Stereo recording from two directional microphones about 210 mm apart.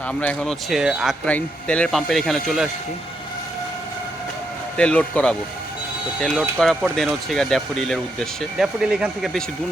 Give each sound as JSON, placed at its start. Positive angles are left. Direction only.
{"t": 0.1, "sound": "speech", "side_deg": 5}
{"t": 4.8, "sound": "speech", "side_deg": 5}